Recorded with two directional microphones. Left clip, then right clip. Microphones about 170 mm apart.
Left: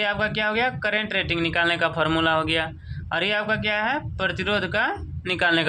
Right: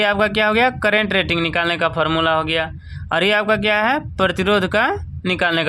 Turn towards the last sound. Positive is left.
turn(degrees=-25)  # may be behind; listen again after turning